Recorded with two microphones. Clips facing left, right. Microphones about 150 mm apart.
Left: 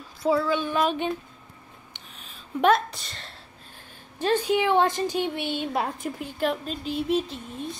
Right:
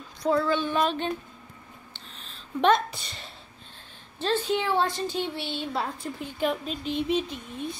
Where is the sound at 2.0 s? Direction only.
10° left (ahead or behind).